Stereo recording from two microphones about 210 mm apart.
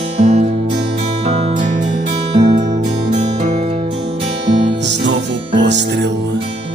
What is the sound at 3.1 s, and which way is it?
Music, 35° right (ahead or behind).